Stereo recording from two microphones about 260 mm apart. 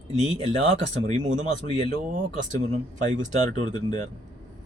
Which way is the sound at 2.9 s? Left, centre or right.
Right.